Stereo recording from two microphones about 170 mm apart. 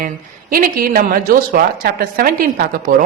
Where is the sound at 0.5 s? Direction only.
55° right (ahead or behind).